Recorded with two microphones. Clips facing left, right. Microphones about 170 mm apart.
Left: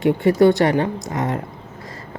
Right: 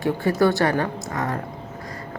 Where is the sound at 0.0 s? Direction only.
20° left (ahead or behind).